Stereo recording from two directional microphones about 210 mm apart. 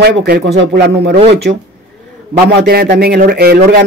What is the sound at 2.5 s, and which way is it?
Speech, 50° right (ahead or behind).